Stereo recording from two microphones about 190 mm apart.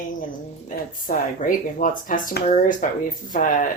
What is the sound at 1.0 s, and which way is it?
Speech, 45° left (ahead or behind).